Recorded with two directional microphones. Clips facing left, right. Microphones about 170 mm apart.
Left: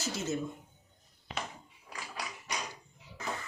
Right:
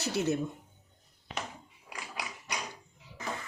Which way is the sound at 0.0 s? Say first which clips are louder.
Right 5 dB; 65° right (ahead or behind).